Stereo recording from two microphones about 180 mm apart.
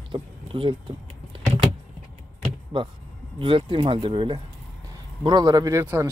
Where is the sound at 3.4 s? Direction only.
30° right (ahead or behind).